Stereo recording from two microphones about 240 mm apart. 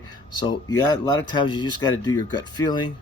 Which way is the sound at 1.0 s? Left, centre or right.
Centre.